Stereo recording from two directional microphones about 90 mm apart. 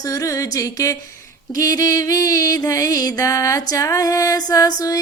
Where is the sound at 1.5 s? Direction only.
40° left (ahead or behind).